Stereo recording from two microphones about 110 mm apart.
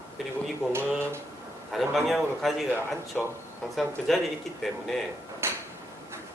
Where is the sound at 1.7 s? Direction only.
Centre (ahead or behind).